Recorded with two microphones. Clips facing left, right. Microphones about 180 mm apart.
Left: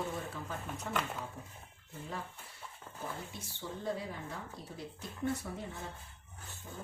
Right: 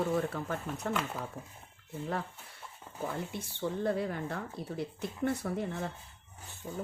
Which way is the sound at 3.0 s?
60° right (ahead or behind).